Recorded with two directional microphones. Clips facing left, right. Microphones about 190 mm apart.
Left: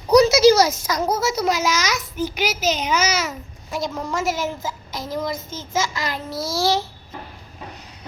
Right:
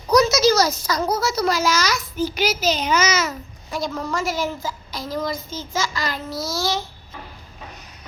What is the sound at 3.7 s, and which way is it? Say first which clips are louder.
A woman's voice: even; 25° left (ahead or behind).